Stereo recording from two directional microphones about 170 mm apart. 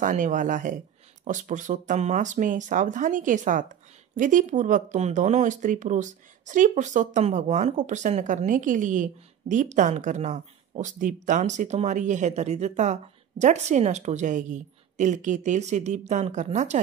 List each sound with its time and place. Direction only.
0.0 s speech: 50° right (ahead or behind)